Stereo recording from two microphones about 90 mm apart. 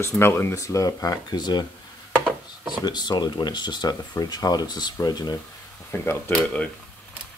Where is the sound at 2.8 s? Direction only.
55° left (ahead or behind).